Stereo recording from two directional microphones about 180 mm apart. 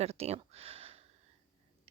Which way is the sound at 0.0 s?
35° right (ahead or behind).